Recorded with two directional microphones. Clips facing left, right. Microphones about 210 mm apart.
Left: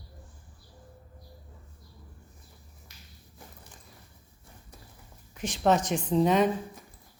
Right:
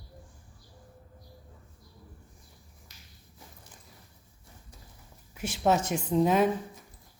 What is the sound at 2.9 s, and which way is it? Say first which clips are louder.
Finger snapping: left 3 dB; 55° left (ahead or behind).